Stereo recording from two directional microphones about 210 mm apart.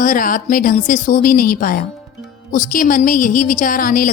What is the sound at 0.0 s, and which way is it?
A woman's voice, 40° left (ahead or behind).